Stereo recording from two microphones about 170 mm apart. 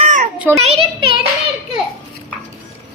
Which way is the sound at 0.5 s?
35° right (ahead or behind).